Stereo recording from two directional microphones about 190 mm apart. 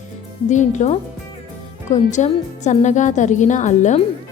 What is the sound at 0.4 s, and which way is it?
A woman's voice, 40° left (ahead or behind).